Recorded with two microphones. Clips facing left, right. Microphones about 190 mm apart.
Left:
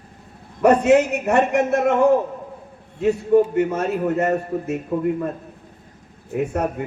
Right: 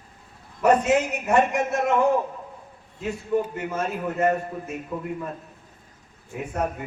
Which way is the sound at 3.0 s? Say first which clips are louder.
Left 9 dB; 60° left (ahead or behind).